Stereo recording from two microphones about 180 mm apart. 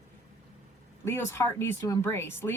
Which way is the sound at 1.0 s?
15° left (ahead or behind).